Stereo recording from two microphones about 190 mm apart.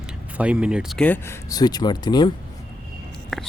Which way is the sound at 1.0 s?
10° left (ahead or behind).